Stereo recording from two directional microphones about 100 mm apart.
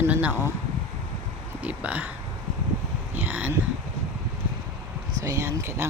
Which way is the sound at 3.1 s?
20° right (ahead or behind).